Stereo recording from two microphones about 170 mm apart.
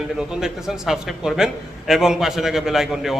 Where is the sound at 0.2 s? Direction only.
5° right (ahead or behind).